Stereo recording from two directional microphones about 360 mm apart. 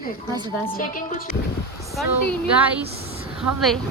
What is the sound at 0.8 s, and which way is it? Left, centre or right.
Speech, left.